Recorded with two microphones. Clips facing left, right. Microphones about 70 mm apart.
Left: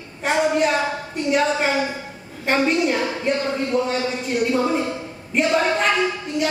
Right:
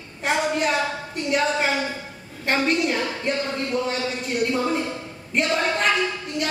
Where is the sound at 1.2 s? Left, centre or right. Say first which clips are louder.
Left 3 dB; centre.